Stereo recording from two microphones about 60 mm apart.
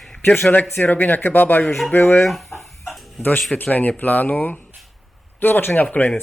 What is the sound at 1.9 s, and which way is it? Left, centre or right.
Speech, left.